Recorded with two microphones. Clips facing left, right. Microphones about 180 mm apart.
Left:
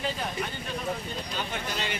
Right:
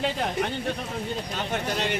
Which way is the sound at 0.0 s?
65° right (ahead or behind).